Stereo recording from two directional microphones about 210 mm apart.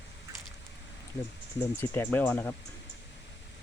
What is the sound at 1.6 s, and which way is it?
Speech, 10° left (ahead or behind).